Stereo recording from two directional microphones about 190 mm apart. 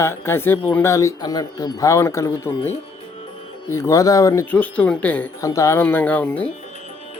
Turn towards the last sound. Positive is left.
turn(degrees=10)  # may be behind; listen again after turning